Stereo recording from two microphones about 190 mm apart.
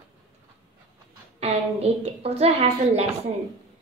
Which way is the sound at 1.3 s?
35° right (ahead or behind).